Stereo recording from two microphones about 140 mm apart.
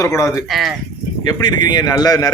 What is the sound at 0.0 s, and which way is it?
Speech, 20° left (ahead or behind).